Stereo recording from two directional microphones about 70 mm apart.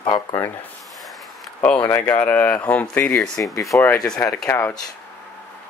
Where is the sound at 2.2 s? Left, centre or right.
Left.